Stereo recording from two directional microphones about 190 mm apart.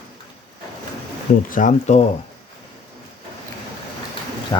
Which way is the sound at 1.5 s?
45° left (ahead or behind).